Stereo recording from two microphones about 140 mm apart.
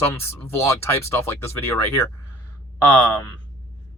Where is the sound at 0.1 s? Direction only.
20° left (ahead or behind).